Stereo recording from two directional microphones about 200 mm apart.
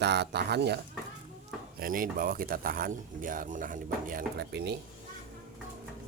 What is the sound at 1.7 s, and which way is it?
Speech, 45° right (ahead or behind).